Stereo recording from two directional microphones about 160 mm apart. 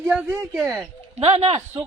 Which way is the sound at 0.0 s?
10° right (ahead or behind).